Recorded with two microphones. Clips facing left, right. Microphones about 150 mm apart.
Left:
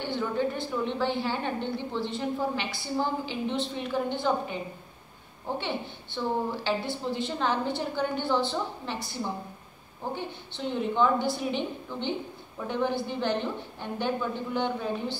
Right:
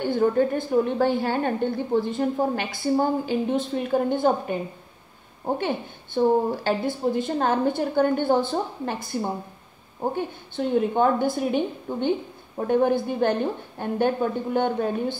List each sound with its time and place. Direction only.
0.0 s a woman's voice: 50° right (ahead or behind)
5.6 s a woman's voice: 50° right (ahead or behind)